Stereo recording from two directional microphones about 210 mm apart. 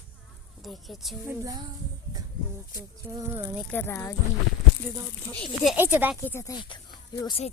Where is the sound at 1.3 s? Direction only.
15° right (ahead or behind).